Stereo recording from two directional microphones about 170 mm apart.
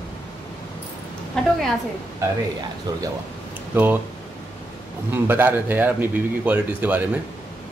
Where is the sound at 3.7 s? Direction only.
10° right (ahead or behind).